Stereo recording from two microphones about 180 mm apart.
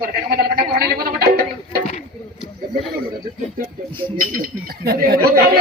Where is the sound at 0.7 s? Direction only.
55° right (ahead or behind).